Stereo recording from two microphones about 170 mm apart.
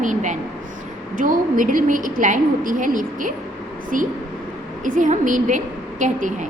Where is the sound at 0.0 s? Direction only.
45° right (ahead or behind).